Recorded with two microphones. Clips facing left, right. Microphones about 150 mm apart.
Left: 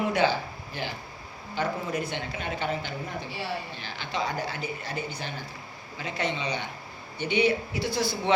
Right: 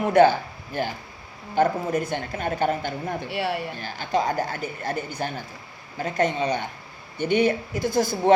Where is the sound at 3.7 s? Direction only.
45° right (ahead or behind).